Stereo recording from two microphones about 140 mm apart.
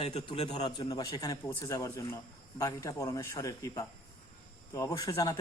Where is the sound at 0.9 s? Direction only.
25° left (ahead or behind).